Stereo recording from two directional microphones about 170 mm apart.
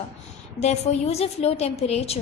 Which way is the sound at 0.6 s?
40° left (ahead or behind).